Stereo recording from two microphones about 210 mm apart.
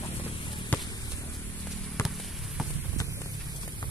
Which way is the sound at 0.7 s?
10° left (ahead or behind).